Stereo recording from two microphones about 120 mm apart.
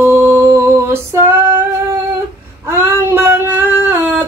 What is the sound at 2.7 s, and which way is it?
Female singing, 20° right (ahead or behind).